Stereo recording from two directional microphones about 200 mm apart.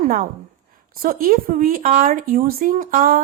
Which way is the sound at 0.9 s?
45° right (ahead or behind).